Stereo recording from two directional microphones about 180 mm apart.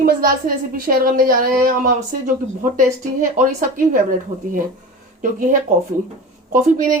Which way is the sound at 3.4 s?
45° right (ahead or behind).